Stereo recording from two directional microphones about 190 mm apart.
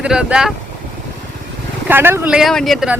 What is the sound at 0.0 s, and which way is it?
Speech, 5° right (ahead or behind).